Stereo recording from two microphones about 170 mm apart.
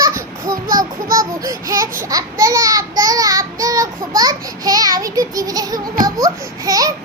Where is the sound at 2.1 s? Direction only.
20° right (ahead or behind).